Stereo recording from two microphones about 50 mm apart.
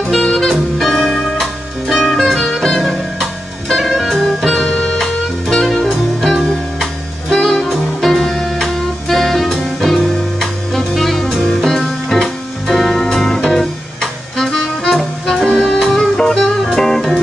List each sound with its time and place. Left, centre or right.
0.2 s music: centre
0.5 s music: centre
4.5 s music: centre